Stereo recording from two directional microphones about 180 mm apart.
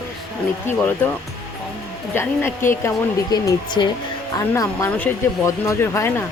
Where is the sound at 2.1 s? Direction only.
15° left (ahead or behind).